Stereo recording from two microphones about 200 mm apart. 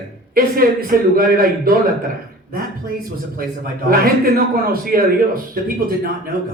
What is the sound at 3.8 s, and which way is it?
Speech, 45° right (ahead or behind).